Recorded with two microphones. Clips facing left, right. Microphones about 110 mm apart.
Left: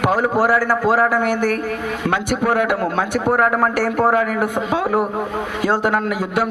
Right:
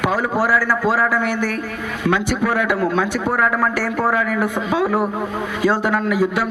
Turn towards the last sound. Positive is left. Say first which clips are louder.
# right 1 dB
turn(degrees=55)  # may be behind; listen again after turning